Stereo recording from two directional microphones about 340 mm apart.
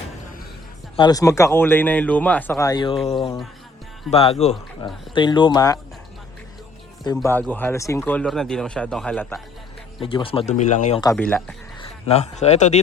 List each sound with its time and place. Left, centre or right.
0.9 s speech: centre
7.2 s speech: centre
10.0 s speech: centre
11.0 s speech: centre
11.8 s speech: centre